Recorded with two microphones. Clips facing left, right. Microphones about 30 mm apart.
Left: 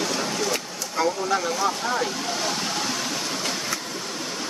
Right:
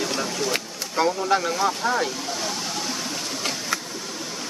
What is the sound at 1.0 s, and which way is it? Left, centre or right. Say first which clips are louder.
Vehicle: right 2 dB; right.